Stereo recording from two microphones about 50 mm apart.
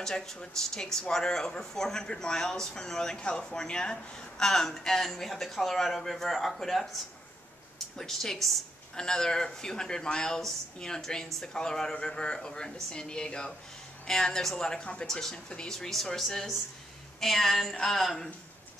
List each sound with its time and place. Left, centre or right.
0.0 s speech: centre
8.0 s speech: centre